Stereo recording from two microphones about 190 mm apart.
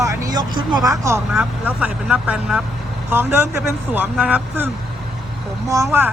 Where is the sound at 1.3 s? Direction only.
5° right (ahead or behind).